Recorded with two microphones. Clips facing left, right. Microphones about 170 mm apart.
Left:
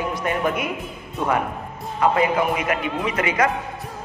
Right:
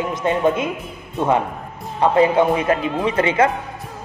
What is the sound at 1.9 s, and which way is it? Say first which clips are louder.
A man's voice: right 4 dB; 30° right (ahead or behind).